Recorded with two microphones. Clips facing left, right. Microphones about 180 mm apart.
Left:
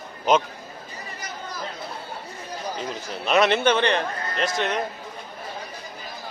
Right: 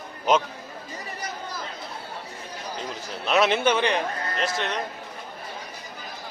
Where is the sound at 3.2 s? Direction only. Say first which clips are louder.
Left 2 dB; centre (ahead or behind).